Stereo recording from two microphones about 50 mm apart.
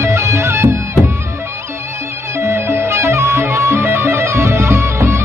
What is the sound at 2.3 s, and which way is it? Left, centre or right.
Music, right.